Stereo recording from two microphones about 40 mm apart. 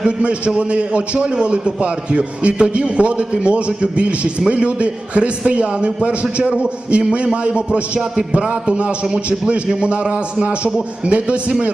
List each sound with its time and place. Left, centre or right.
0.0 s a man's voice: right